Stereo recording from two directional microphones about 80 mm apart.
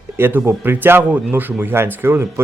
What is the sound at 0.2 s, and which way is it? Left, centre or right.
Speech, right.